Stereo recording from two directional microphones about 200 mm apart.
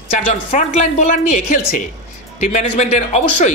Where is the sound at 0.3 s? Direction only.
35° left (ahead or behind).